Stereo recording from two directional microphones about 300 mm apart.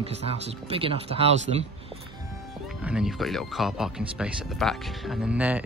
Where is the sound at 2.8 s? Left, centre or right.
Centre.